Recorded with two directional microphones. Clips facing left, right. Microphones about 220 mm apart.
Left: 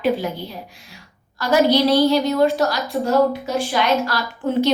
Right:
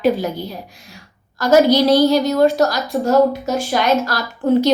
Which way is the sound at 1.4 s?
45° right (ahead or behind).